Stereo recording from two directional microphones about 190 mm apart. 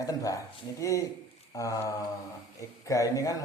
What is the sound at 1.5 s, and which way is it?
Mantra, 15° left (ahead or behind).